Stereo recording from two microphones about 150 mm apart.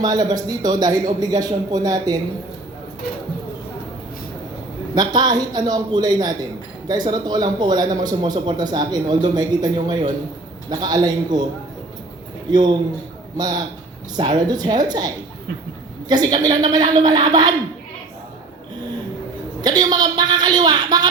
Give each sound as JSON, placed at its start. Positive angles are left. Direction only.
{"t": 0.0, "sound": "a man's voice", "side_deg": -25}
{"t": 4.9, "sound": "a man's voice", "side_deg": -25}
{"t": 12.5, "sound": "a man's voice", "side_deg": -30}
{"t": 19.6, "sound": "a man's voice", "side_deg": -25}